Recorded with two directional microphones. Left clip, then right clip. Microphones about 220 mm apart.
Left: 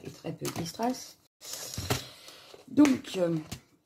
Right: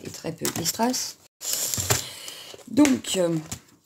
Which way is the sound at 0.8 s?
45° right (ahead or behind).